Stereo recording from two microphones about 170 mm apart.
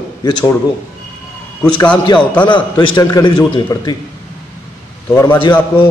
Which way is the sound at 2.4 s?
25° left (ahead or behind).